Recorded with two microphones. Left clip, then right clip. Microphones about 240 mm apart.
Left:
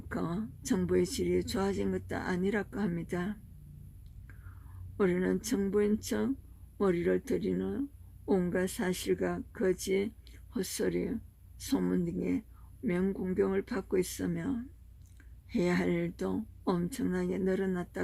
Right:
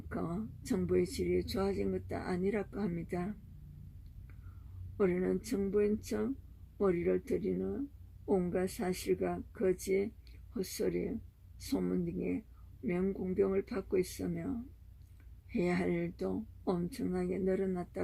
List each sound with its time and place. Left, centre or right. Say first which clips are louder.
0.1 s speech: left 3 dB; centre
4.9 s speech: left 2 dB; centre